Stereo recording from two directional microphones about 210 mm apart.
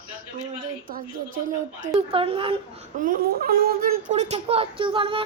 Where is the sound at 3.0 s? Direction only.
45° right (ahead or behind); by 5.2 s 25° right (ahead or behind).